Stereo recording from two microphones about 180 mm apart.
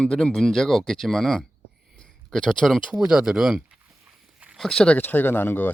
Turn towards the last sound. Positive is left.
turn(degrees=10)  # may be behind; listen again after turning